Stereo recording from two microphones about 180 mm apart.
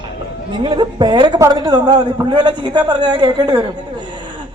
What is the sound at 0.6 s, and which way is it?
A man's voice, 25° right (ahead or behind).